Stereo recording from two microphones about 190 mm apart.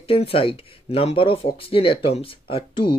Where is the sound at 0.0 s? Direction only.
30° left (ahead or behind).